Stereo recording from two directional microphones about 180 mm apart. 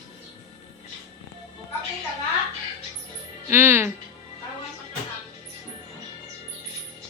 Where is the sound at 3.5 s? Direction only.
10° right (ahead or behind).